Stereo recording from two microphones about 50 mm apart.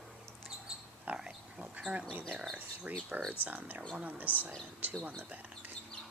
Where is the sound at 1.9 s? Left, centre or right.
Right.